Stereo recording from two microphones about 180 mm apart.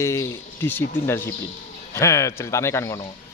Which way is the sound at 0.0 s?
15° left (ahead or behind).